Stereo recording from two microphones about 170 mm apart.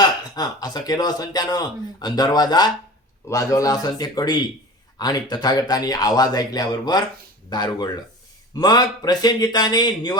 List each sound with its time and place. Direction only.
0.0 s a man's voice: 25° left (ahead or behind)